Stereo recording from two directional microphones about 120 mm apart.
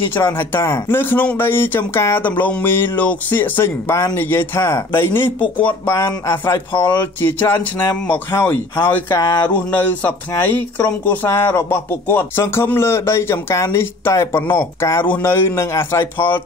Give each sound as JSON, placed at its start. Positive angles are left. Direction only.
{"t": 0.1, "sound": "speech", "side_deg": 15}